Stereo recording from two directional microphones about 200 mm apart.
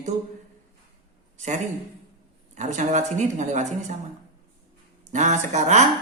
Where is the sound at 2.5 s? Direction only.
40° right (ahead or behind).